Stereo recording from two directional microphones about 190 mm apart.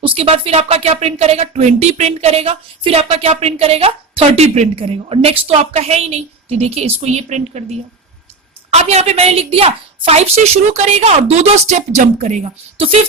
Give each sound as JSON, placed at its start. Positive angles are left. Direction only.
{"t": 0.0, "sound": "speech", "side_deg": -30}
{"t": 8.7, "sound": "speech", "side_deg": -35}